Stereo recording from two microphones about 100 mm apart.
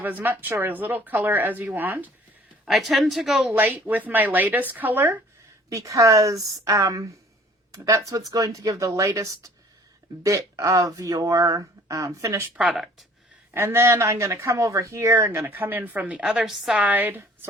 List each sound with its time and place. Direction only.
0.0 s speech: 20° right (ahead or behind)
2.6 s speech: centre (ahead or behind)
3.5 s speech: 20° right (ahead or behind)
5.6 s speech: 35° right (ahead or behind)
12.5 s speech: 5° right (ahead or behind)
13.5 s speech: 25° right (ahead or behind)
16.2 s speech: 5° right (ahead or behind)
16.7 s a woman's voice: 15° right (ahead or behind)